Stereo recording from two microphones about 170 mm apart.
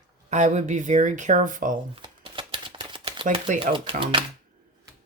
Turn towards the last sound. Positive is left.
turn(degrees=-30)  # may be behind; listen again after turning